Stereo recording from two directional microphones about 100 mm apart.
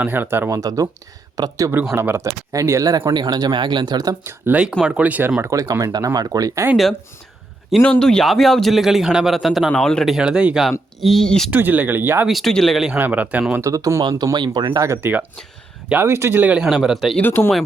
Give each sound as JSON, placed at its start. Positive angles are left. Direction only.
{"t": 0.0, "sound": "speech", "side_deg": -20}
{"t": 0.5, "sound": "speech", "side_deg": -35}
{"t": 2.0, "sound": "speech", "side_deg": -25}
{"t": 3.1, "sound": "speech", "side_deg": -45}
{"t": 4.2, "sound": "speech", "side_deg": -25}
{"t": 4.8, "sound": "speech", "side_deg": -15}
{"t": 7.8, "sound": "speech", "side_deg": 10}
{"t": 10.2, "sound": "speech", "side_deg": -10}
{"t": 11.5, "sound": "speech", "side_deg": -15}
{"t": 12.3, "sound": "speech", "side_deg": 0}
{"t": 12.9, "sound": "speech", "side_deg": -15}
{"t": 13.6, "sound": "speech", "side_deg": -35}
{"t": 14.8, "sound": "speech", "side_deg": -25}
{"t": 17.2, "sound": "speech", "side_deg": 20}